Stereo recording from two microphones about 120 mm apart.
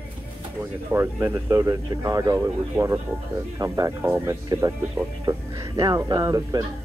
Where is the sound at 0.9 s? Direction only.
20° right (ahead or behind).